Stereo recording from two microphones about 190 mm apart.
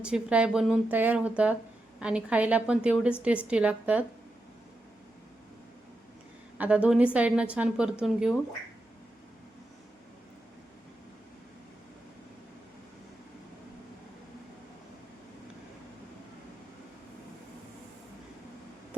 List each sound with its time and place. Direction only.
0.0 s a woman's voice: 5° right (ahead or behind)
6.6 s a woman's voice: 5° right (ahead or behind)